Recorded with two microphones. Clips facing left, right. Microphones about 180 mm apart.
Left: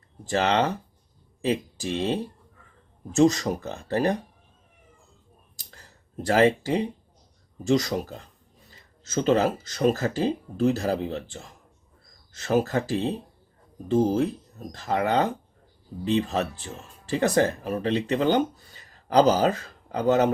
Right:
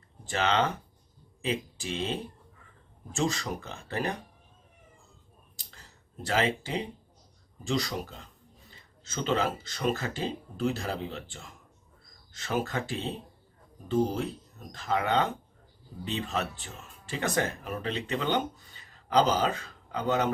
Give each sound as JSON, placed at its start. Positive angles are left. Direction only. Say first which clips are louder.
{"t": 0.3, "sound": "speech", "louder": "left 4 dB", "side_deg": 35}
{"t": 6.2, "sound": "speech", "louder": "left 8 dB", "side_deg": 45}
{"t": 7.7, "sound": "speech", "louder": "left 8 dB", "side_deg": 40}